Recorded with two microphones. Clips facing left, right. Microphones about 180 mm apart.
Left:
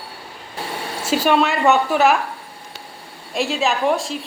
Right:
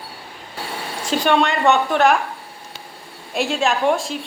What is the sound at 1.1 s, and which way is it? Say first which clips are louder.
A man's voice: left 1 dB; 5° left (ahead or behind).